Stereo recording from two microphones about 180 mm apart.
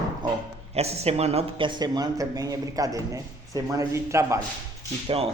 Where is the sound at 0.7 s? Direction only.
35° right (ahead or behind); by 4.4 s 15° right (ahead or behind).